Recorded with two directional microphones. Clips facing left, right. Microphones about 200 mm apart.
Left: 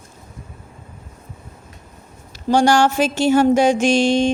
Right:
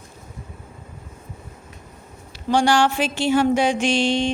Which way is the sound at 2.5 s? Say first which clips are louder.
Left 3 dB; 45° left (ahead or behind).